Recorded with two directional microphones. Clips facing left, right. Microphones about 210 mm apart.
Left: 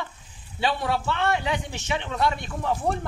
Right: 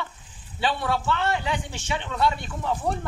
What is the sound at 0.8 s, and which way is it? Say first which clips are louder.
A man's voice: even; 20° left (ahead or behind).